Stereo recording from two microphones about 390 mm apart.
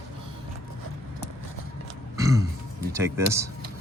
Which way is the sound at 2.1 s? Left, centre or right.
Centre.